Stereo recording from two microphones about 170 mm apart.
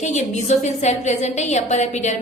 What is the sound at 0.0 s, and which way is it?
A woman's voice, 45° left (ahead or behind).